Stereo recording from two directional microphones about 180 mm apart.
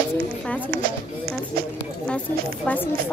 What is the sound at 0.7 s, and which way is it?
Speech, 55° right (ahead or behind).